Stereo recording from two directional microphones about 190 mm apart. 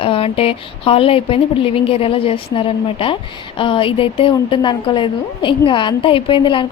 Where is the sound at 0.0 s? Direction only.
30° left (ahead or behind).